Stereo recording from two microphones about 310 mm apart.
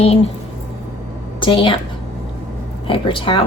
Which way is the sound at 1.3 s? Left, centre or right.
Centre.